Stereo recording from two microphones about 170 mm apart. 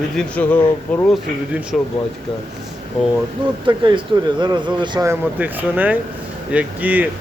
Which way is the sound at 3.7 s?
25° right (ahead or behind).